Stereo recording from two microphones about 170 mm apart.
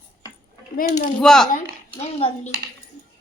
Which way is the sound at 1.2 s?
5° left (ahead or behind).